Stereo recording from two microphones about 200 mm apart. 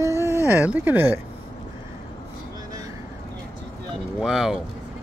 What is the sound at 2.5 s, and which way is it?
Vehicle, 20° right (ahead or behind).